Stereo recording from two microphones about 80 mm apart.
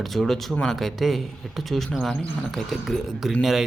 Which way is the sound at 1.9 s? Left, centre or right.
Centre.